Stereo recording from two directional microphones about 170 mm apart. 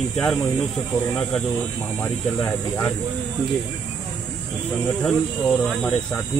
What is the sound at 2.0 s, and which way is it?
Speech, 10° left (ahead or behind).